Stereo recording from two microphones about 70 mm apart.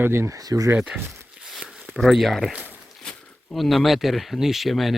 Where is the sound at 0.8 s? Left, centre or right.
Centre.